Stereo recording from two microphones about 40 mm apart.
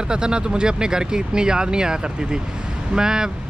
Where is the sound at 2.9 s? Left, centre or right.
Centre.